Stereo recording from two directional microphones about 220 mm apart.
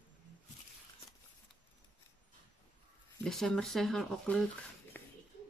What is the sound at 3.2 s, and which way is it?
Speech, centre (ahead or behind).